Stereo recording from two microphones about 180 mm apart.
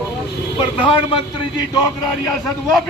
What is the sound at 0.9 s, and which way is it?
Speech, 30° left (ahead or behind).